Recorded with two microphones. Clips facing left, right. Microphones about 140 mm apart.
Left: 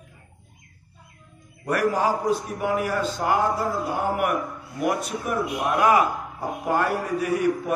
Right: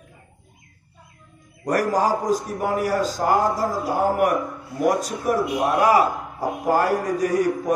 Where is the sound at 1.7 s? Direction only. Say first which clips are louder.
Right 2 dB; 40° right (ahead or behind).